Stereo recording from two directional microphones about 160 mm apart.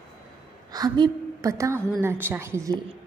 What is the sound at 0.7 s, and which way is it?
A woman's voice, 25° right (ahead or behind).